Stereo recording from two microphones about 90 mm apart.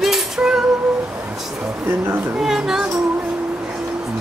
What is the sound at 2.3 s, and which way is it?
Speech, 5° right (ahead or behind).